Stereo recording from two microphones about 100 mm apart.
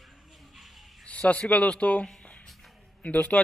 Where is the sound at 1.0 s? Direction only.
10° left (ahead or behind).